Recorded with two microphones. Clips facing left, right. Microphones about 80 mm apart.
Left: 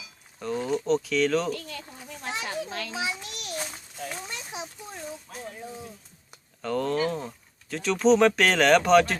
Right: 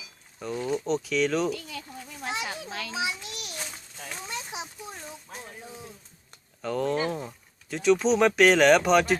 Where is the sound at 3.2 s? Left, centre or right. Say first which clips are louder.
Left 2 dB; centre.